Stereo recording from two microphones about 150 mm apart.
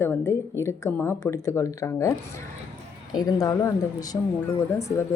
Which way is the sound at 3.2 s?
25° left (ahead or behind).